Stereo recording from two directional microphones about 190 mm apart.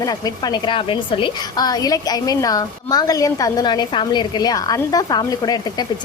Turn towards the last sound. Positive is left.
turn(degrees=20)  # may be behind; listen again after turning